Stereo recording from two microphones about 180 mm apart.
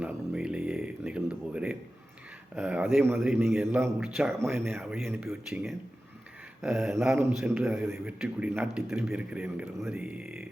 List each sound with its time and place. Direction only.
0.0 s a sound: 5° right (ahead or behind)
2.6 s a man's voice: 5° right (ahead or behind)
4.8 s a man's voice: centre (ahead or behind)